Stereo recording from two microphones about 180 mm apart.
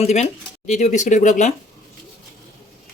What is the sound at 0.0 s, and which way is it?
Speech, 40° left (ahead or behind).